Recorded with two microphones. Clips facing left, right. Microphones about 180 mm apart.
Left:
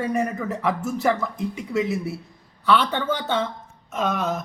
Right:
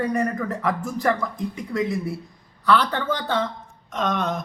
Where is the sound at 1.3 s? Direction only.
25° left (ahead or behind).